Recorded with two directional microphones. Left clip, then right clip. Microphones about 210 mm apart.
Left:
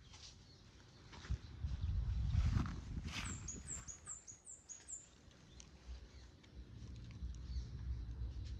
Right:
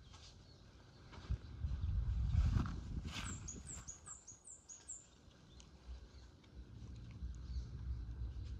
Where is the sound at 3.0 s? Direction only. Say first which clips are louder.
Left 1 dB; centre (ahead or behind).